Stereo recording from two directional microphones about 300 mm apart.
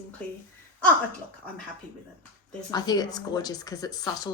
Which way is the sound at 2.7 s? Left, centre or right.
Centre.